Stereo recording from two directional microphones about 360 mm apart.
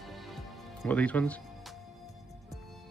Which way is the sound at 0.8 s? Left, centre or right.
Centre.